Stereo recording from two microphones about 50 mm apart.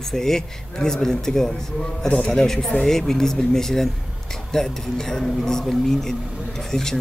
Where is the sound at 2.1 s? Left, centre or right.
Left.